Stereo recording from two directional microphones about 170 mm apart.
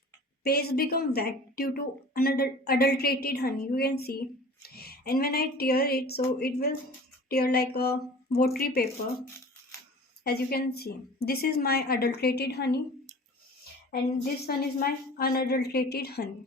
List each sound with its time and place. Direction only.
0.4 s speech: 65° left (ahead or behind)
10.2 s speech: 70° left (ahead or behind)
14.4 s speech: 65° left (ahead or behind)